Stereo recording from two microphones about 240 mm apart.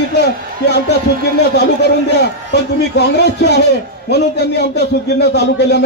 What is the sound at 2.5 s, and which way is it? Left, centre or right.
A man's voice, left.